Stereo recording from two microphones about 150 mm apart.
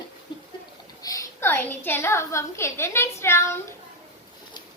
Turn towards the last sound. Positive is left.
turn(degrees=15)  # may be behind; listen again after turning